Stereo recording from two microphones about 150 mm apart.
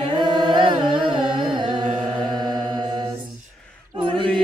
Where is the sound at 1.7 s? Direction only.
50° right (ahead or behind).